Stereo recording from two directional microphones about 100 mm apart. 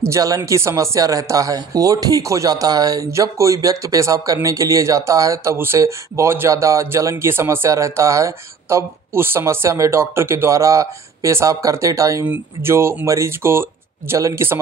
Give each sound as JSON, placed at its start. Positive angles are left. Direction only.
{"t": 0.0, "sound": "speech", "side_deg": -35}